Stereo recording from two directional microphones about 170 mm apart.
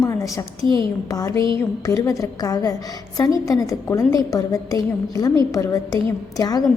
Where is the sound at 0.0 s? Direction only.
20° left (ahead or behind).